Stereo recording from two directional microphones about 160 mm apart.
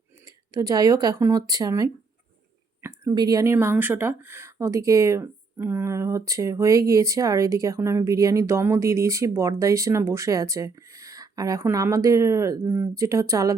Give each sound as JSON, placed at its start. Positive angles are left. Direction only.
{"t": 0.3, "sound": "speech", "side_deg": -20}